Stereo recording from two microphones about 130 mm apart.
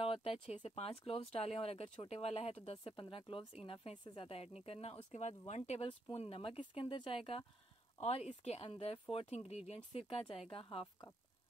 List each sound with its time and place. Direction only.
0.0 s speech: 50° left (ahead or behind)